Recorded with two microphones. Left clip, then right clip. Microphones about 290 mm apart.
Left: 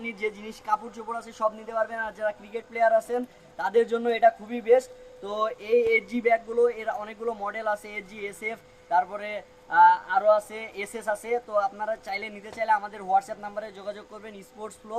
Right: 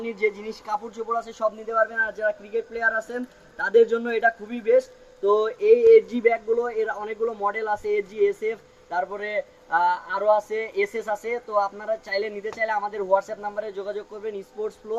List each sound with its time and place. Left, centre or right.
0.0 s a man's voice: centre